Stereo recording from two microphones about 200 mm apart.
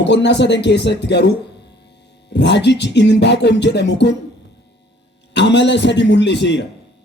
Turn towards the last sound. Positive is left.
turn(degrees=60)  # may be behind; listen again after turning